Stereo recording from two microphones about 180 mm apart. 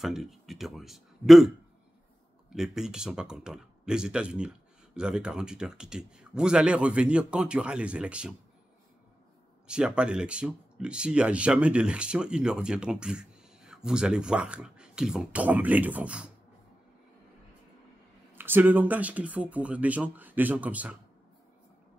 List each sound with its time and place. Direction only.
0.0 s speech: centre (ahead or behind)
2.5 s speech: 5° right (ahead or behind)
9.7 s speech: 5° right (ahead or behind)
18.4 s speech: 10° right (ahead or behind)